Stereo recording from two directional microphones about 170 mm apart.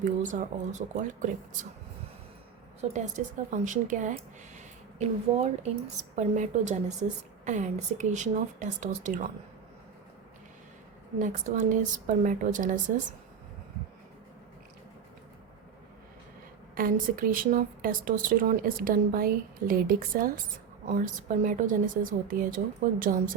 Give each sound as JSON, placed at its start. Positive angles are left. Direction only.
{"t": 0.0, "sound": "a woman's voice", "side_deg": -45}
{"t": 2.8, "sound": "a woman's voice", "side_deg": -45}
{"t": 4.5, "sound": "a sound", "side_deg": -40}
{"t": 6.1, "sound": "a woman's voice", "side_deg": -45}
{"t": 11.2, "sound": "a woman's voice", "side_deg": -45}
{"t": 16.7, "sound": "a woman's voice", "side_deg": -55}